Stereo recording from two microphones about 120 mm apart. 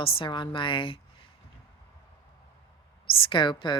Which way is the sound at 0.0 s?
50° left (ahead or behind).